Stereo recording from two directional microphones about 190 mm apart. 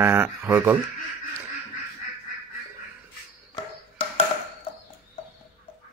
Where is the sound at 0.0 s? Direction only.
10° right (ahead or behind).